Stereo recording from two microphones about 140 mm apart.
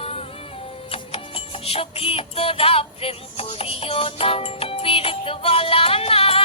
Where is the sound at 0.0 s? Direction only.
45° left (ahead or behind).